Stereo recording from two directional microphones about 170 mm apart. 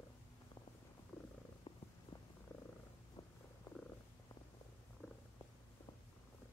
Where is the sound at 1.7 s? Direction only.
35° left (ahead or behind).